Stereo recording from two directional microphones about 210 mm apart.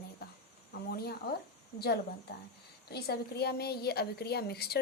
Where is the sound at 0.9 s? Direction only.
50° left (ahead or behind).